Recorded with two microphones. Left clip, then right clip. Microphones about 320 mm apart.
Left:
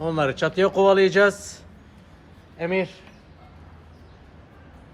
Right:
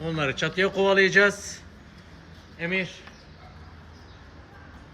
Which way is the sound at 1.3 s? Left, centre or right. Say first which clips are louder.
Left 3 dB; left.